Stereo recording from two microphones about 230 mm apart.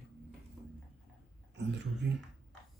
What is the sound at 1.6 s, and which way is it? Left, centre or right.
Speech, right.